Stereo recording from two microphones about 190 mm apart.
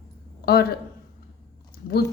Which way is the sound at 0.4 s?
55° left (ahead or behind).